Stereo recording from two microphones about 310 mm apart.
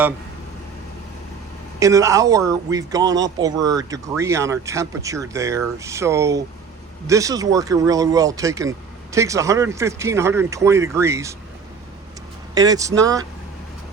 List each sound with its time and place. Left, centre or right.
1.8 s speech: centre
12.5 s speech: centre